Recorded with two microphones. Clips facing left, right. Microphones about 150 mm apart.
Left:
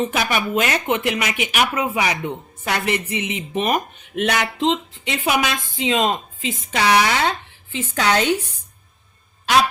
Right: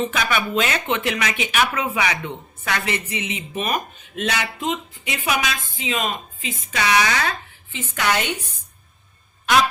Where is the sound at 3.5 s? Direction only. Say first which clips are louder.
Left 4 dB; 25° left (ahead or behind).